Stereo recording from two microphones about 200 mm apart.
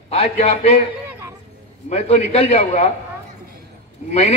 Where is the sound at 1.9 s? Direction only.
35° left (ahead or behind).